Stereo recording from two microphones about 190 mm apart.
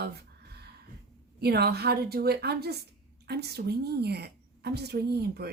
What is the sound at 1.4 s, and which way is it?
A woman's voice, 55° right (ahead or behind).